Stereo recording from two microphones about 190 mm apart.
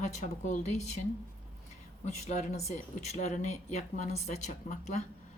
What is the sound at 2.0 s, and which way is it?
Speech, 35° left (ahead or behind).